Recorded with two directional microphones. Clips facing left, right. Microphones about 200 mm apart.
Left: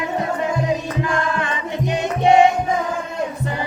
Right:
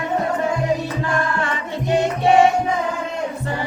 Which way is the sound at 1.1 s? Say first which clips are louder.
Right 1 dB; 20° left (ahead or behind).